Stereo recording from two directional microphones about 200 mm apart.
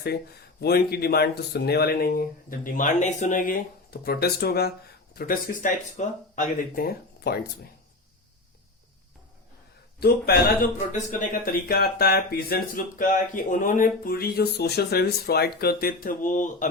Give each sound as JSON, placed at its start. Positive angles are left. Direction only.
{"t": 0.6, "sound": "speech", "side_deg": 50}
{"t": 10.0, "sound": "speech", "side_deg": 50}